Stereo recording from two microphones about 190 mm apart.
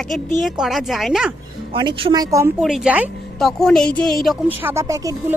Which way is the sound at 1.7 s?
25° right (ahead or behind).